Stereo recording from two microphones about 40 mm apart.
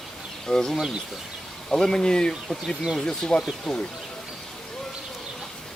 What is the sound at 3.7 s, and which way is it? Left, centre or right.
Speech, centre.